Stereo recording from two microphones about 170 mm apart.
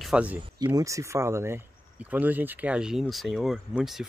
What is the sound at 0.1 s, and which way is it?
Speech, 10° right (ahead or behind).